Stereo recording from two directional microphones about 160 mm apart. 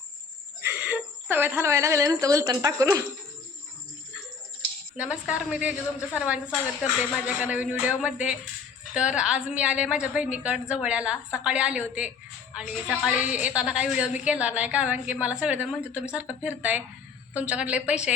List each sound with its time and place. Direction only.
0.6 s a woman's voice: 10° right (ahead or behind)
4.9 s a woman's voice: 5° right (ahead or behind)